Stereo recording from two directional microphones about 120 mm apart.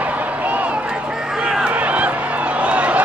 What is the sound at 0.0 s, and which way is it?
Run, 10° right (ahead or behind).